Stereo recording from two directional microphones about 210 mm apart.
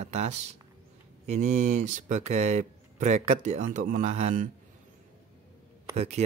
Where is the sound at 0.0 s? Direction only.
30° right (ahead or behind).